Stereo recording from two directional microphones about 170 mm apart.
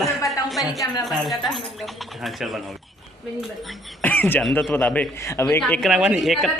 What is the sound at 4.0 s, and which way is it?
A man's voice, 10° left (ahead or behind).